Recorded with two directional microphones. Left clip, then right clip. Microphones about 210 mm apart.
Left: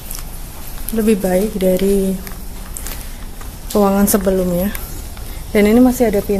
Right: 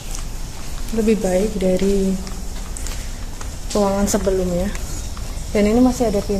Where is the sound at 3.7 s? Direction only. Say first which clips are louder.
Left 4 dB; 30° left (ahead or behind).